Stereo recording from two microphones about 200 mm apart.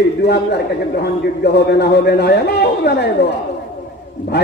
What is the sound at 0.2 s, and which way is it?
A man's voice, 55° left (ahead or behind).